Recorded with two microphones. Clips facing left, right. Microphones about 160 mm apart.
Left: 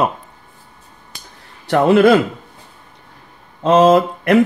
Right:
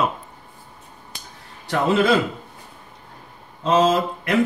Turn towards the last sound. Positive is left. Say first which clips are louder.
# left 8 dB
turn(degrees=60)  # may be behind; listen again after turning